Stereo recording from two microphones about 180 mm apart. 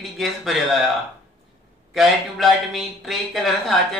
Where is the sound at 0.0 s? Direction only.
Centre (ahead or behind).